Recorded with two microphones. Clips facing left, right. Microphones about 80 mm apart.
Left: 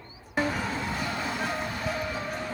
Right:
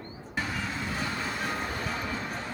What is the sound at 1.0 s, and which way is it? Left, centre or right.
Music, centre.